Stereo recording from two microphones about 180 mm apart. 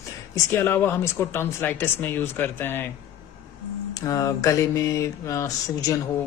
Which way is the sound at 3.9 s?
20° left (ahead or behind).